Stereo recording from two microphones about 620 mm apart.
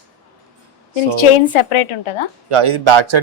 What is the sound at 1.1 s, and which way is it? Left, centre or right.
A woman's voice, left.